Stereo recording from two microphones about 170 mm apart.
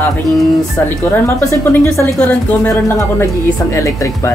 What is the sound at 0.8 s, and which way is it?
A woman's voice, 10° left (ahead or behind).